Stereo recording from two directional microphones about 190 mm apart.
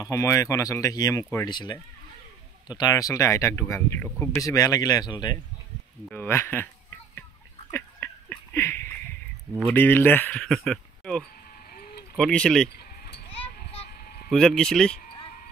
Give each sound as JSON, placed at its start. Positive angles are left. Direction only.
{"t": 0.0, "sound": "speech", "side_deg": 15}
{"t": 2.8, "sound": "speech", "side_deg": 20}
{"t": 6.0, "sound": "a sound", "side_deg": 10}
{"t": 9.7, "sound": "speech", "side_deg": 10}
{"t": 11.7, "sound": "vehicle", "side_deg": 50}
{"t": 12.2, "sound": "speech", "side_deg": 5}
{"t": 13.8, "sound": "a sound", "side_deg": 50}
{"t": 14.3, "sound": "speech", "side_deg": 5}